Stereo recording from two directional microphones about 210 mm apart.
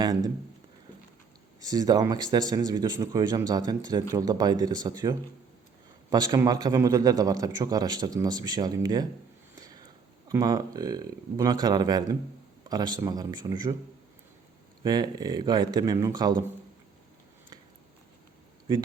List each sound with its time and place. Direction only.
0.0 s speech: 20° right (ahead or behind)
1.6 s a man's voice: 20° right (ahead or behind)
10.2 s speech: 20° right (ahead or behind)
14.8 s speech: 20° right (ahead or behind)